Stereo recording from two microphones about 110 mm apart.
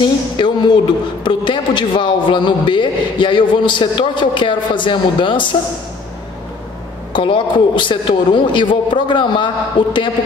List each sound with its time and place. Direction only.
0.0 s a man's voice: 45° left (ahead or behind)
7.1 s a man's voice: 50° left (ahead or behind)